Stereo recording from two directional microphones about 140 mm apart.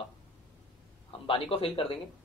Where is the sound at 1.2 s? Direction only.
45° left (ahead or behind).